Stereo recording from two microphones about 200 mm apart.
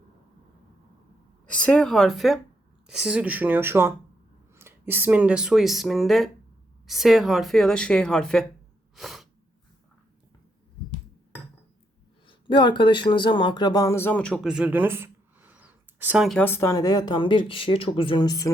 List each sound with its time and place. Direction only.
1.5 s speech: 5° left (ahead or behind)
9.0 s sneeze: centre (ahead or behind)
12.3 s speech: 25° left (ahead or behind)